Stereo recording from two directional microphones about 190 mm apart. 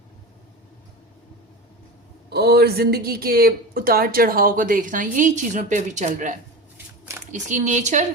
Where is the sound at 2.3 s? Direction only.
55° right (ahead or behind).